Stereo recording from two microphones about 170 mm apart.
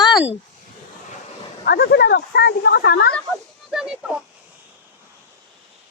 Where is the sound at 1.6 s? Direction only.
65° left (ahead or behind).